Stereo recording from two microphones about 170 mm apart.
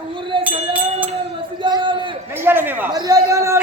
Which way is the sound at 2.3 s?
15° right (ahead or behind).